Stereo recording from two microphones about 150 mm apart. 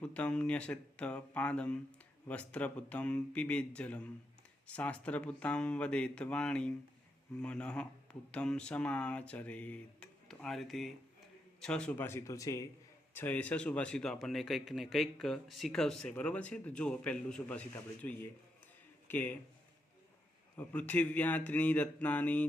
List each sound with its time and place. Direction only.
0.0 s speech: 5° left (ahead or behind)
13.1 s speech: 10° left (ahead or behind)
20.6 s speech: 10° left (ahead or behind)